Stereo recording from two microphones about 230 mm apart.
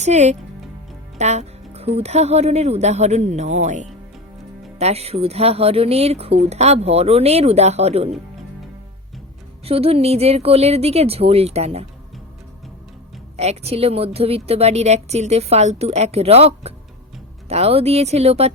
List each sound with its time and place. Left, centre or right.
0.0 s a woman's voice: right
9.6 s a woman's voice: right
13.3 s a woman's voice: right